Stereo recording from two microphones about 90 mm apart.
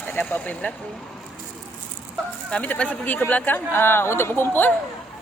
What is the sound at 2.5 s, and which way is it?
Speech, 15° left (ahead or behind).